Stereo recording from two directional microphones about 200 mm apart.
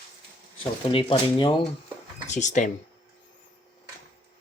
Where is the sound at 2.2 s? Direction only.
35° left (ahead or behind).